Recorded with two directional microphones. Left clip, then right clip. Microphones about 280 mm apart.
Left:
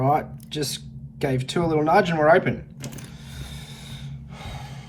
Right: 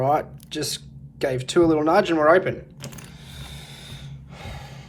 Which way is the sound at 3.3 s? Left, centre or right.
Right.